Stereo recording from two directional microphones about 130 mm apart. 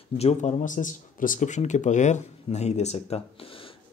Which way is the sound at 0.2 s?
60° left (ahead or behind).